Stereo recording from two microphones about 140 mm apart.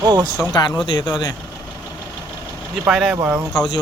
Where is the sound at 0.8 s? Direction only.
30° left (ahead or behind).